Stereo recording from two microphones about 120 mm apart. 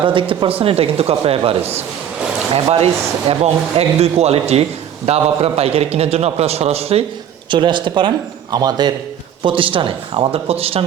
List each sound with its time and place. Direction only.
0.0 s speech: 45° right (ahead or behind)
7.5 s speech: 40° right (ahead or behind)
9.4 s speech: 45° right (ahead or behind)